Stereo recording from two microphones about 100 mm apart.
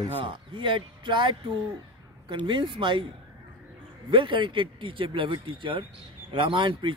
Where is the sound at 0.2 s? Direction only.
60° right (ahead or behind).